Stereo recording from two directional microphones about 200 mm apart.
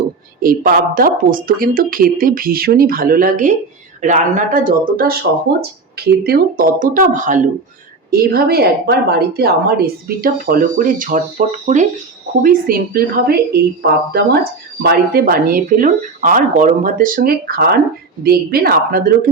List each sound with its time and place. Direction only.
0.4 s a woman's voice: 45° right (ahead or behind)